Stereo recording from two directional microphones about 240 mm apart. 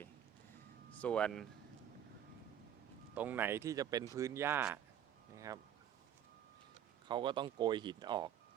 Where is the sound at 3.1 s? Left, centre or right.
Centre.